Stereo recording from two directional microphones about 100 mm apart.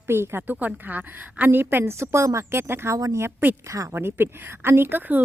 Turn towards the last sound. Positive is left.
turn(degrees=-20)  # may be behind; listen again after turning